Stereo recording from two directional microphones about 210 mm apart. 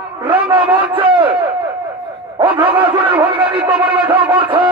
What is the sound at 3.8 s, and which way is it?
Speech, 5° right (ahead or behind).